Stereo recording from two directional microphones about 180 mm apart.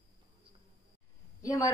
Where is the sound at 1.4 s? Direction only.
20° left (ahead or behind).